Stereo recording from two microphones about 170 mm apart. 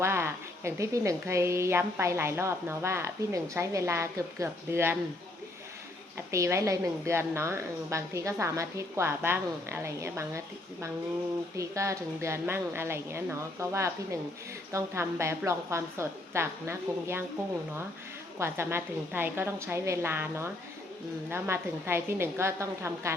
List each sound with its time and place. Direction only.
0.0 s a woman's voice: 15° right (ahead or behind)
6.3 s a woman's voice: 15° right (ahead or behind)
18.3 s a woman's voice: 15° right (ahead or behind)